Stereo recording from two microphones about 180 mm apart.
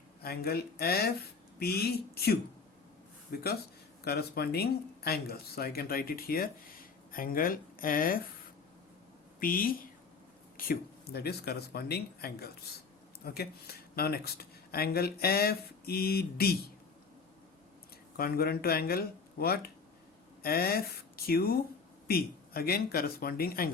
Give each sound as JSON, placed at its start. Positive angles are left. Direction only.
{"t": 0.2, "sound": "speech", "side_deg": 60}
{"t": 9.4, "sound": "speech", "side_deg": 50}
{"t": 18.2, "sound": "speech", "side_deg": 60}